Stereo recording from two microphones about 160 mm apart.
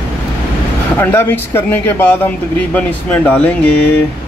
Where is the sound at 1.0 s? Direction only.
15° left (ahead or behind).